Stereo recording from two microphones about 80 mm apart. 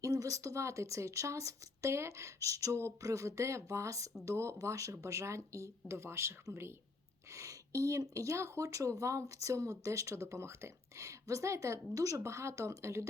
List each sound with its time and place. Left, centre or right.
0.0 s speech: right